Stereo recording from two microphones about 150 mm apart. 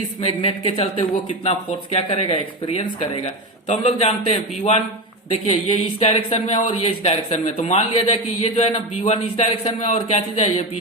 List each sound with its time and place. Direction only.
0.2 s speech: 40° left (ahead or behind)